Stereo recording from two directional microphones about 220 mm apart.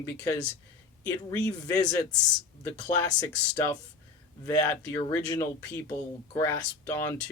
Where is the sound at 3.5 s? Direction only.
10° left (ahead or behind).